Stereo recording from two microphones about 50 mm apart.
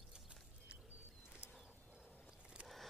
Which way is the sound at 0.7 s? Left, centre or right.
Right.